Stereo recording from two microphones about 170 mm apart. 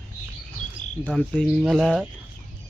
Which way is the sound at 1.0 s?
Centre (ahead or behind).